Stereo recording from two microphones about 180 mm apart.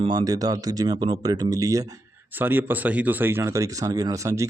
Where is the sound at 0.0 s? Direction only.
25° right (ahead or behind).